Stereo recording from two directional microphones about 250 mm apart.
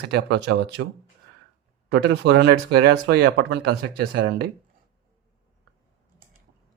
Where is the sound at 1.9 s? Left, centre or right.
Right.